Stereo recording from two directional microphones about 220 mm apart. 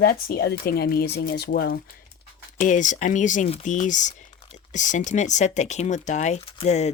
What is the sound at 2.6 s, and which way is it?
Speech, 35° left (ahead or behind).